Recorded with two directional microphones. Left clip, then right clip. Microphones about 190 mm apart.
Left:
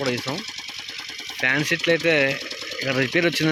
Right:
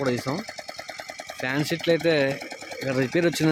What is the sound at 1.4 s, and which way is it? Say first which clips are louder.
Speech: left 6 dB; 10° right (ahead or behind).